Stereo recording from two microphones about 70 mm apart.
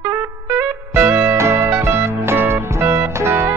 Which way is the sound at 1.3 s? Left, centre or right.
Right.